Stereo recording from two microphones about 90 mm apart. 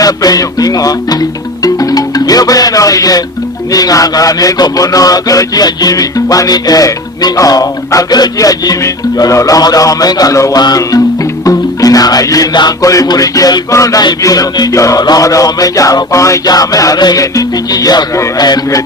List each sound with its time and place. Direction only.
0.0 s music: 45° left (ahead or behind)
3.7 s a man's voice: 45° left (ahead or behind)
11.4 s music: 40° left (ahead or behind)
15.0 s a man's voice: 40° left (ahead or behind)